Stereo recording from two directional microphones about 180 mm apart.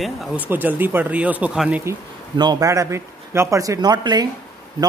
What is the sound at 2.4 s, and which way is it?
Speech, 20° right (ahead or behind).